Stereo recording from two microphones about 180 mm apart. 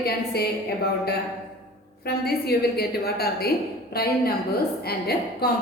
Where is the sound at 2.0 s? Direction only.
60° left (ahead or behind).